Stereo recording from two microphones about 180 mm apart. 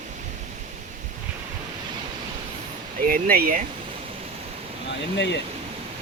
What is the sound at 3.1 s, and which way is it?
Speech, 55° right (ahead or behind).